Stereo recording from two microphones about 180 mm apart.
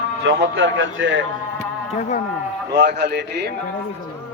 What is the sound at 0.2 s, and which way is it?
A man's voice, 85° right.